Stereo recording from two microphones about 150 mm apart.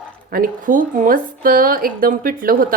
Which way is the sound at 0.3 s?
70° right (ahead or behind).